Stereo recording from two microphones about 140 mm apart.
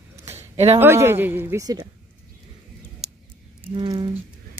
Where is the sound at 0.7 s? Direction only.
15° right (ahead or behind).